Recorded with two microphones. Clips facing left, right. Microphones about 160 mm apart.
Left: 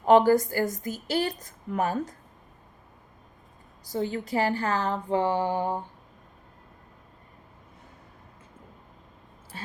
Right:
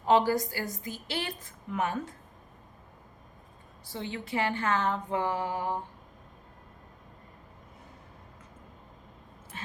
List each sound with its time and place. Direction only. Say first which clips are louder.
0.0 s a woman's voice: left 6 dB; 50° left (ahead or behind)
3.8 s speech: left 8 dB; 40° left (ahead or behind)